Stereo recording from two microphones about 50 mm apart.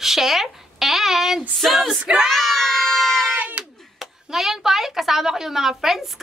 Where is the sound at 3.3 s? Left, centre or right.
Right.